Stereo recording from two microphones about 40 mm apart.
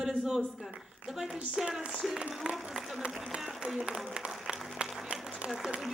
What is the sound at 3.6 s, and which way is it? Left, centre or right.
Speech, right.